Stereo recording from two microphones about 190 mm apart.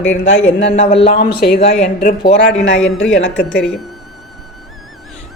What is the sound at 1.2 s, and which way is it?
Speech, 55° left (ahead or behind).